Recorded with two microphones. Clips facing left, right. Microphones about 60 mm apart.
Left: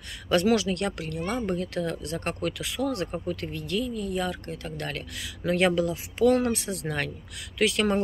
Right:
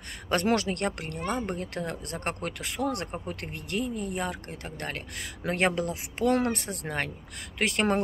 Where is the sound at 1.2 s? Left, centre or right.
Centre.